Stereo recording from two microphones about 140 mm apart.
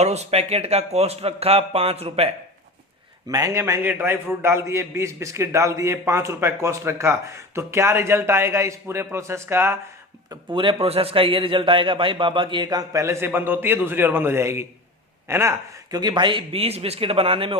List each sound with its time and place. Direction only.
0.0 s speech: 50° right (ahead or behind)
3.2 s a man's voice: 25° right (ahead or behind)
10.2 s a man's voice: 35° right (ahead or behind); by 16.0 s 20° right (ahead or behind)
16.0 s speech: 30° right (ahead or behind)